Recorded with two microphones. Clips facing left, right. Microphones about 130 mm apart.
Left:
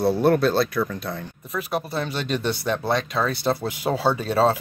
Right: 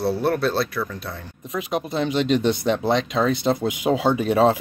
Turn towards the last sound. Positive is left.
turn(degrees=-15)  # may be behind; listen again after turning